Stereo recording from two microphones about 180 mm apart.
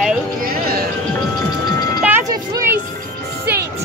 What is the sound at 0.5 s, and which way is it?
Music, 55° right (ahead or behind).